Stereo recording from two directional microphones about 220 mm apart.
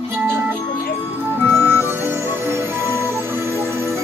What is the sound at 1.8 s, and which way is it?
Music, 10° right (ahead or behind).